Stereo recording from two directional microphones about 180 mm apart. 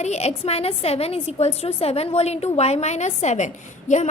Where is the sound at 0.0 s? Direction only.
40° left (ahead or behind).